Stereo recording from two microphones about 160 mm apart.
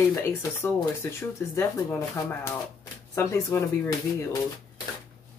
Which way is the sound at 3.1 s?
20° left (ahead or behind).